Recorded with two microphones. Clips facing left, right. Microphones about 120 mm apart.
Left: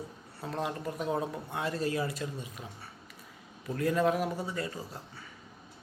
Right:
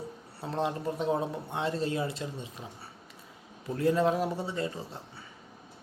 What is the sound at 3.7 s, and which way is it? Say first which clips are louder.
A man's voice: right 2 dB; 30° right (ahead or behind).